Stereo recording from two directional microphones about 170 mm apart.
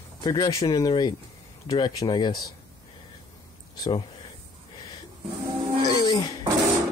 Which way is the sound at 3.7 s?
20° left (ahead or behind).